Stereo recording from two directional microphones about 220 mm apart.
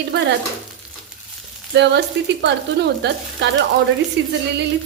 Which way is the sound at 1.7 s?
50° right (ahead or behind).